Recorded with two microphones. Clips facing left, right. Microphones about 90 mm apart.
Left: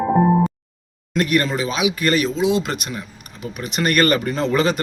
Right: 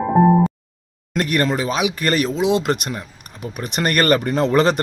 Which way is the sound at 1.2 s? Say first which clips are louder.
Even; 45° right (ahead or behind).